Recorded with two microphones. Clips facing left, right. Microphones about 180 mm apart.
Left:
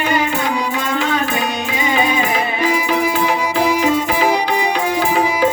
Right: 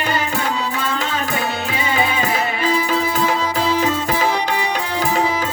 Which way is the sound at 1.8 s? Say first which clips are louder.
Left 3 dB; 15° left (ahead or behind).